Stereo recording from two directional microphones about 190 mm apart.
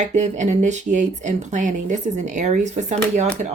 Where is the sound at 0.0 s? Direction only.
40° right (ahead or behind).